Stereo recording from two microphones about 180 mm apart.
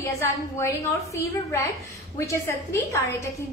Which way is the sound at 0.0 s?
15° left (ahead or behind).